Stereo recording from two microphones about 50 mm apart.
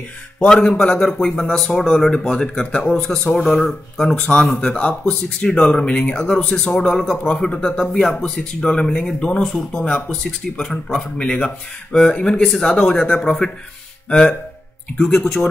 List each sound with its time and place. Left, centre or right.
0.4 s speech: centre
13.4 s speech: centre